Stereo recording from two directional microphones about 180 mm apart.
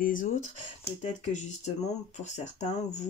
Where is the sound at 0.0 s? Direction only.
45° left (ahead or behind).